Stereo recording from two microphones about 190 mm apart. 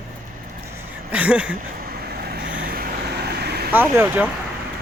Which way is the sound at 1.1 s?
5° right (ahead or behind).